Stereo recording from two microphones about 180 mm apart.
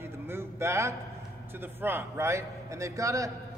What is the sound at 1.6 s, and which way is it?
A man's voice, 10° right (ahead or behind).